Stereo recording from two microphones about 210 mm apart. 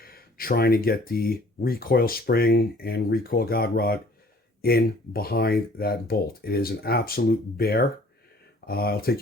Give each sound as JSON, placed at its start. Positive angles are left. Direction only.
{"t": 0.0, "sound": "speech", "side_deg": 45}